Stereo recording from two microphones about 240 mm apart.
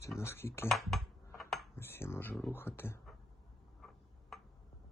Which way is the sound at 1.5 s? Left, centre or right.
Centre.